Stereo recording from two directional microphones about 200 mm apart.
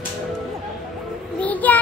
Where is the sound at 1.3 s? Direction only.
5° left (ahead or behind).